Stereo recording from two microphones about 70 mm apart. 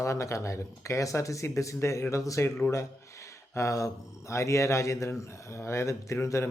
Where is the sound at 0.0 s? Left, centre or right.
Left.